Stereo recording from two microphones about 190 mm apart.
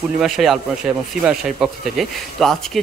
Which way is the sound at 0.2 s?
Centre (ahead or behind).